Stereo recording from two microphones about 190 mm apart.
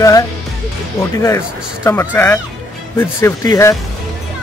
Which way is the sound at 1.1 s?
15° left (ahead or behind).